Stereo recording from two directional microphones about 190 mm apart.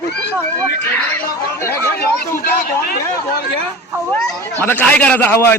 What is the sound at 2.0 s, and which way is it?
Speech, 50° left (ahead or behind).